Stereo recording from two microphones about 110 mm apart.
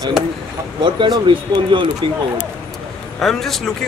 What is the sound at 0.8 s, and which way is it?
Speech, 40° right (ahead or behind).